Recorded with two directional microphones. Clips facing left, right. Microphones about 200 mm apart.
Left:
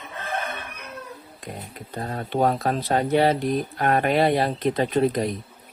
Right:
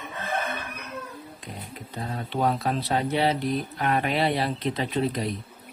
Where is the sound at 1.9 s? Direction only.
50° left (ahead or behind).